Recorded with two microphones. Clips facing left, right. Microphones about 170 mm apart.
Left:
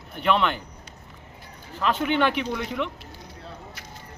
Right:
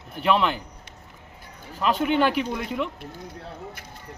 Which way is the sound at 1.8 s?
5° right (ahead or behind).